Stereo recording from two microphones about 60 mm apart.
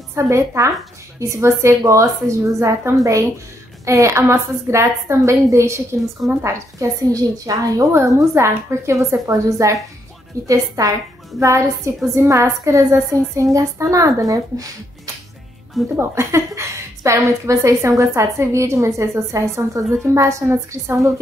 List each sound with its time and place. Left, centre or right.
0.1 s a woman's voice: right
6.4 s a woman's voice: right
7.9 s a woman's voice: right
11.3 s a woman's voice: right
16.0 s a woman's voice: right